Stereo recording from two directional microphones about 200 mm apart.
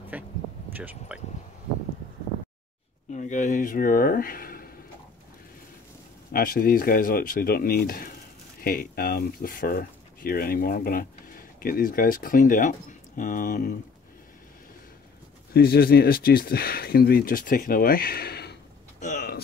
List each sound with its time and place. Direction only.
0.1 s speech: 5° right (ahead or behind)
3.1 s speech: 35° left (ahead or behind)
6.3 s speech: 45° left (ahead or behind)
15.5 s speech: 50° left (ahead or behind)
18.9 s a sound: 40° left (ahead or behind)